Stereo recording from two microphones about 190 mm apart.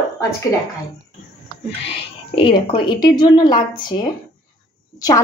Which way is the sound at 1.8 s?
30° left (ahead or behind).